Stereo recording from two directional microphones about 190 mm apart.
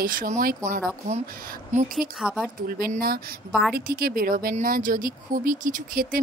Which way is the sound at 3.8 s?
50° right (ahead or behind).